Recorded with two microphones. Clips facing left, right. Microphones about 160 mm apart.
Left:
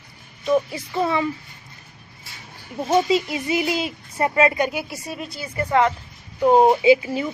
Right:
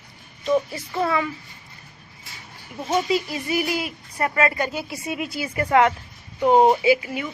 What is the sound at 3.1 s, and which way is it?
Speech, 20° left (ahead or behind).